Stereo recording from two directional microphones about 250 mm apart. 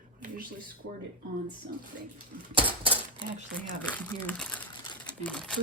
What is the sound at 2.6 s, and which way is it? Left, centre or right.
Speech, right.